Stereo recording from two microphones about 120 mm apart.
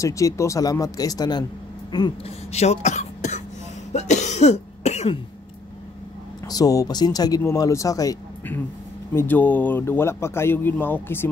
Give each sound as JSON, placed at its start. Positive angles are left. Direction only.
{"t": 0.0, "sound": "speech", "side_deg": 25}
{"t": 1.9, "sound": "a sound", "side_deg": 35}
{"t": 2.2, "sound": "speech", "side_deg": 65}
{"t": 3.9, "sound": "cough", "side_deg": 75}
{"t": 6.5, "sound": "speech", "side_deg": 30}
{"t": 9.1, "sound": "speech", "side_deg": 15}